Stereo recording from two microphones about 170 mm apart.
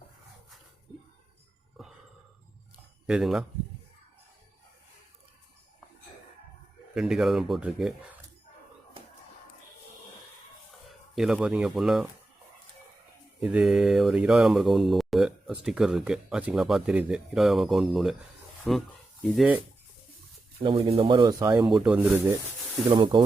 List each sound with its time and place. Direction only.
1.8 s a sound: centre (ahead or behind)
3.1 s speech: centre (ahead or behind)
6.9 s speech: centre (ahead or behind)
11.1 s speech: centre (ahead or behind)
13.4 s speech: 5° right (ahead or behind)
20.6 s speech: 35° right (ahead or behind)
21.7 s speech: 5° right (ahead or behind)
22.9 s speech: 30° right (ahead or behind)